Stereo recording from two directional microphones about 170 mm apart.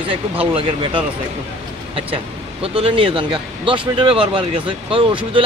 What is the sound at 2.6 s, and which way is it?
Speech, 35° right (ahead or behind).